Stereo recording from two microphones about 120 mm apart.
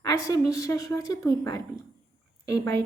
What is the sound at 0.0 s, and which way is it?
A woman's voice, 30° left (ahead or behind).